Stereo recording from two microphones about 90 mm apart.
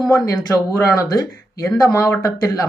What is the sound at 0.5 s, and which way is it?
Speech, 40° left (ahead or behind).